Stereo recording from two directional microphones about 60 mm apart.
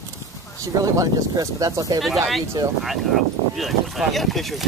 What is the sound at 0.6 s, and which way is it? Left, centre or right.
Speech, right.